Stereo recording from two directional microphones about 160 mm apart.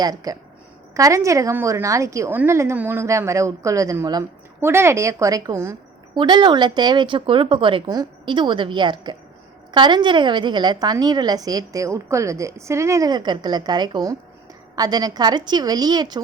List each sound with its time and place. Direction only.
0.0 s a woman's voice: 25° right (ahead or behind)